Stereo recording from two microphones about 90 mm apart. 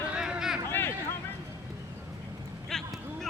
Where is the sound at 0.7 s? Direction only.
25° left (ahead or behind).